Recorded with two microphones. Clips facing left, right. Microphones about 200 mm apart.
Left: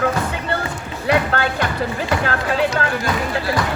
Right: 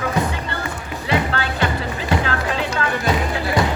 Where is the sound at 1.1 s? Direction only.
50° left (ahead or behind).